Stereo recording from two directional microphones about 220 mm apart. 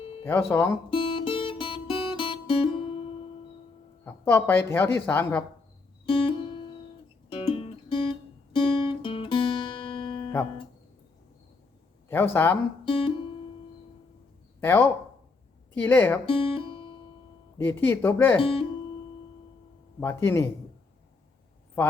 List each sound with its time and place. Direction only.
0.3 s speech: 10° left (ahead or behind)
0.9 s music: 25° left (ahead or behind)
4.0 s speech: 10° left (ahead or behind)
6.1 s music: 20° left (ahead or behind)
8.5 s guitar: 20° left (ahead or behind)
12.0 s speech: 10° left (ahead or behind)
12.8 s music: 25° left (ahead or behind)
14.6 s speech: 10° left (ahead or behind)
16.2 s music: 25° left (ahead or behind)
17.6 s speech: 10° left (ahead or behind)
18.3 s speech: 25° left (ahead or behind)
20.0 s speech: 10° left (ahead or behind)